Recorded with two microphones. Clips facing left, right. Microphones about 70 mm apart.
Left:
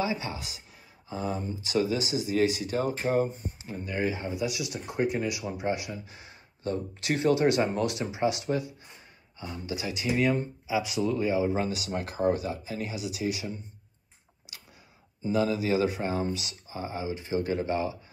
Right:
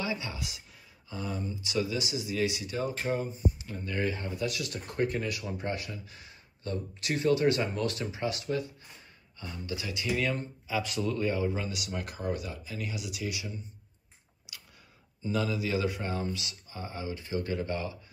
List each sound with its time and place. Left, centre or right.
0.0 s speech: left
3.5 s speech: left
6.0 s a man's voice: left
11.5 s a man's voice: left
15.2 s a man's voice: left